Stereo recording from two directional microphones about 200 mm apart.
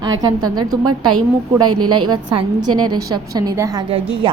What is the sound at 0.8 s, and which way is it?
A woman's voice, 90° right.